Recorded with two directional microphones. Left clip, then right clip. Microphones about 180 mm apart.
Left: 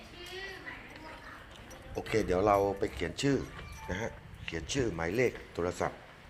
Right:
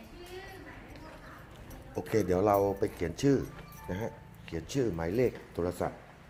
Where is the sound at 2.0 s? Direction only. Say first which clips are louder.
Right 1 dB; 20° right (ahead or behind).